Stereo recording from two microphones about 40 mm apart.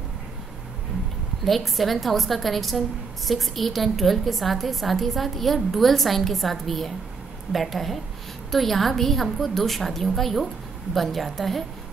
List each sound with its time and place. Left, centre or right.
1.4 s a woman's voice: centre